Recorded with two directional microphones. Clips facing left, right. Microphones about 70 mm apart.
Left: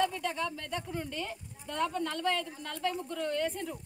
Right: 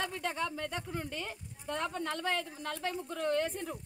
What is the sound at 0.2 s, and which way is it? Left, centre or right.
Speech, right.